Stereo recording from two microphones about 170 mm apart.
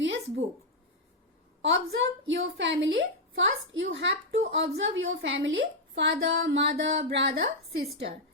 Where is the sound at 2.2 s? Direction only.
90° right.